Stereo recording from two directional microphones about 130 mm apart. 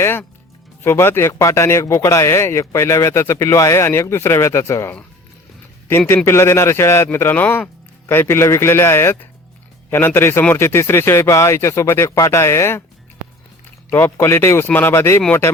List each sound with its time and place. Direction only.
0.0 s a man's voice: 15° left (ahead or behind)
6.2 s speech: 20° left (ahead or behind)
13.9 s a man's voice: 20° left (ahead or behind)